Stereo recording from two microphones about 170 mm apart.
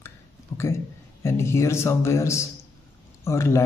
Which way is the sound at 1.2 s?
15° left (ahead or behind).